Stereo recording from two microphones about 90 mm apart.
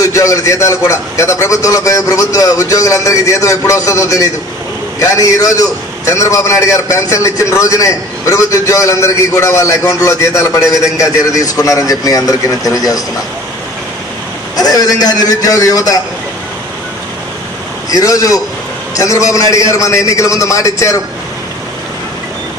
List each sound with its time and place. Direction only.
0.0 s a man's voice: 35° left (ahead or behind)
14.6 s a man's voice: 40° left (ahead or behind)
17.9 s a man's voice: 40° left (ahead or behind)